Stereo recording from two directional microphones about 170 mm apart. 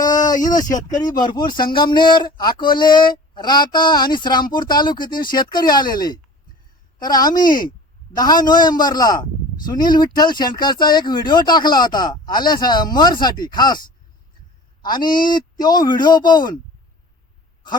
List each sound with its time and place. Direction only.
0.0 s a sound: 25° left (ahead or behind)
0.5 s speech: 20° left (ahead or behind)
15.3 s speech: 25° left (ahead or behind)